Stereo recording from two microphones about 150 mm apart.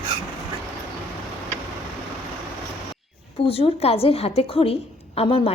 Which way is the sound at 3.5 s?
40° left (ahead or behind).